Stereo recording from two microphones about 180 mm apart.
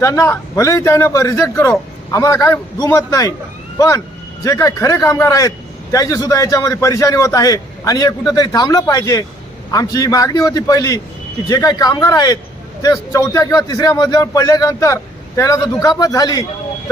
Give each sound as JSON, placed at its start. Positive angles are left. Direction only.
{"t": 0.0, "sound": "a man's voice", "side_deg": 15}